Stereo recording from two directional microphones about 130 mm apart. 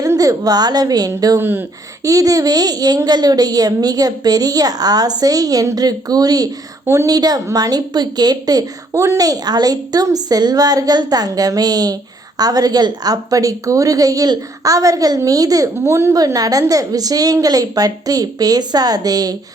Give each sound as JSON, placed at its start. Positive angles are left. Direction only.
{"t": 0.0, "sound": "a woman's voice", "side_deg": -25}
{"t": 1.4, "sound": "speech", "side_deg": -15}
{"t": 2.0, "sound": "a woman's voice", "side_deg": -25}